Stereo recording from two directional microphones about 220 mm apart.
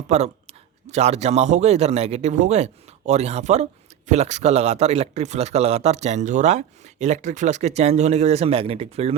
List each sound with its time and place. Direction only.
0.1 s speech: 30° right (ahead or behind)